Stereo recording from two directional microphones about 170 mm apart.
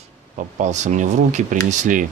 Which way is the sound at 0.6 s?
45° right (ahead or behind).